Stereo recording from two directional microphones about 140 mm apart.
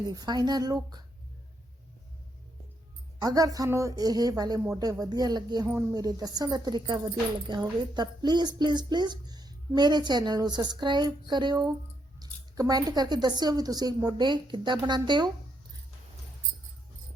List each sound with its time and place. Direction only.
0.1 s speech: 30° right (ahead or behind)
3.2 s a woman's voice: 30° right (ahead or behind)